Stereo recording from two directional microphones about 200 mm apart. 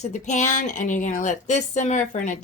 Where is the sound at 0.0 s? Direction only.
35° left (ahead or behind).